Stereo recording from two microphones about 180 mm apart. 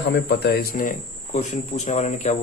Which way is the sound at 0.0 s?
65° left (ahead or behind).